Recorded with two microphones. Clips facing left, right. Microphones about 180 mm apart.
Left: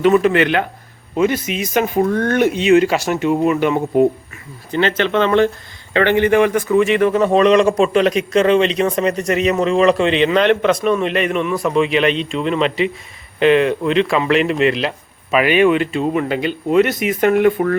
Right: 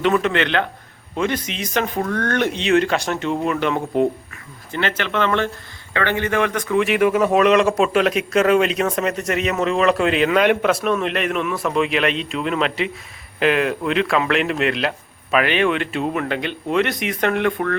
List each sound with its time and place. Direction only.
0.0 s speech: 5° left (ahead or behind)
4.7 s a man's voice: 20° left (ahead or behind)